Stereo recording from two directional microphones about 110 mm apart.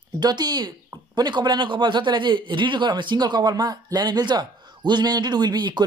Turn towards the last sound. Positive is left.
turn(degrees=-40)  # may be behind; listen again after turning